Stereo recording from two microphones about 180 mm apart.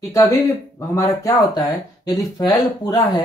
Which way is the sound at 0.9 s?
15° left (ahead or behind).